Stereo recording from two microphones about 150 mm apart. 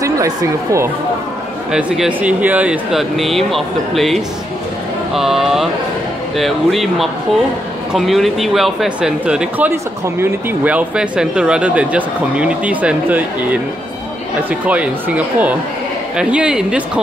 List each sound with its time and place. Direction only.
0.0 s speech: 20° right (ahead or behind)
1.7 s speech: 5° right (ahead or behind)